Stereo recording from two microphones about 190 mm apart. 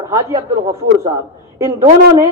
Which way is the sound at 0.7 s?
30° right (ahead or behind).